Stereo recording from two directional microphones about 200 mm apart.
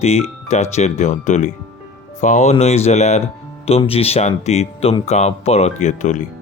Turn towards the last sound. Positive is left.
turn(degrees=35)  # may be behind; listen again after turning